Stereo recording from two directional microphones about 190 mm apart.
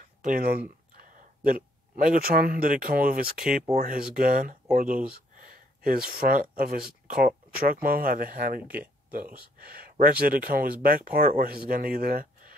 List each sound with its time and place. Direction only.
0.0 s speech: 45° right (ahead or behind)